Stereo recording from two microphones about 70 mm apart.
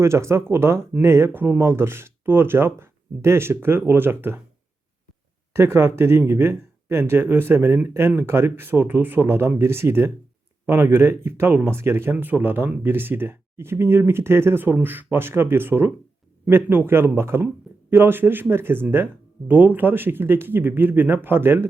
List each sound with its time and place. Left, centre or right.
0.0 s speech: right
5.5 s speech: right